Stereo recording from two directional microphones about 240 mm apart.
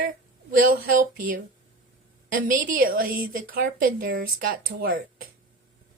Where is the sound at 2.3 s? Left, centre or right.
Right.